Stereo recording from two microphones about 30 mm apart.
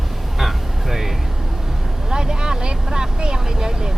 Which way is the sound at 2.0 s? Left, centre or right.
Right.